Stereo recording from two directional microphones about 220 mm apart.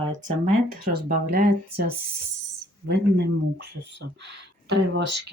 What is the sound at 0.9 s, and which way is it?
Speech, 45° right (ahead or behind).